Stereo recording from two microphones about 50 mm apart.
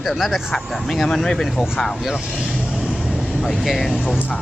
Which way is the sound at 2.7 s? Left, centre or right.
Centre.